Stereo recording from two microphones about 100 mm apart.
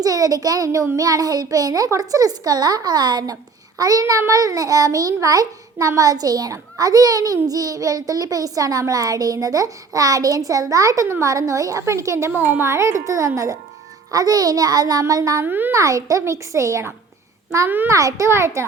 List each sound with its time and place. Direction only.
0.0 s a child's voice: 35° right (ahead or behind)
15.4 s a child's voice: 20° right (ahead or behind)
15.7 s a child's voice: 35° right (ahead or behind)
17.7 s a child's voice: 20° right (ahead or behind)
17.9 s a child's voice: 35° right (ahead or behind)